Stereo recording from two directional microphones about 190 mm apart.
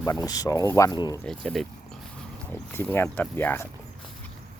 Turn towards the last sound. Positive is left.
turn(degrees=10)  # may be behind; listen again after turning